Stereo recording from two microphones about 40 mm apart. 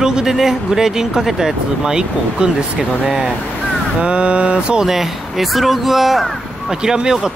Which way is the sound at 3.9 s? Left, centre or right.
Right.